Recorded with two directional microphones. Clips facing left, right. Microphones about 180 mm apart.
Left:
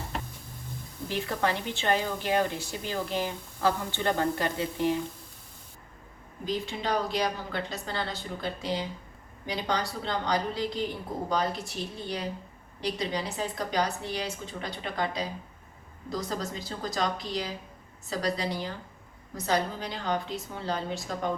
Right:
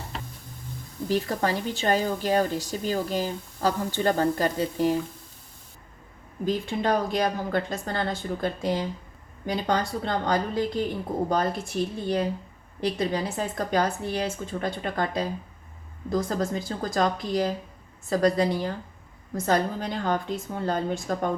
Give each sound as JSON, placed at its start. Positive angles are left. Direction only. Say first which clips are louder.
{"t": 1.0, "sound": "a woman's voice", "louder": "right 4 dB", "side_deg": -40}
{"t": 6.4, "sound": "a woman's voice", "louder": "right 6 dB", "side_deg": -50}